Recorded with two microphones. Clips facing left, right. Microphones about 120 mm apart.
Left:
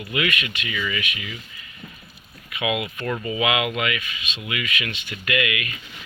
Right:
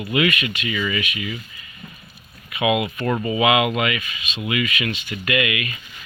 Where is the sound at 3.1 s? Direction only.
30° right (ahead or behind).